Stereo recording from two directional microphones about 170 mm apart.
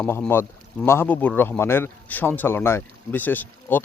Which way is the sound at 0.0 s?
10° left (ahead or behind).